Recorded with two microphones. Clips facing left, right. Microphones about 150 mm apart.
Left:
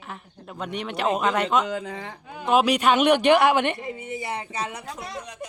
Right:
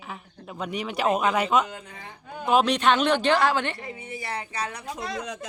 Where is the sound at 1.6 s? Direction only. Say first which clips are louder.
Left 10 dB; 90° left.